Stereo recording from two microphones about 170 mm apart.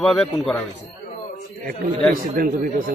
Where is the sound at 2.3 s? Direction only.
55° right (ahead or behind).